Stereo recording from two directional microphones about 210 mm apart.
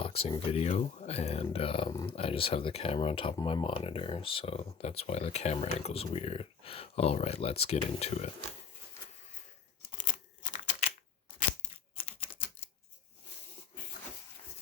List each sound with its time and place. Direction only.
0.0 s speech: 30° left (ahead or behind)
10.4 s typewriter: 35° left (ahead or behind)
11.9 s typing: 25° left (ahead or behind)